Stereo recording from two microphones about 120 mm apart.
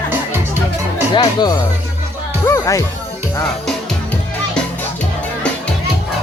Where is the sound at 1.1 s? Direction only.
35° left (ahead or behind).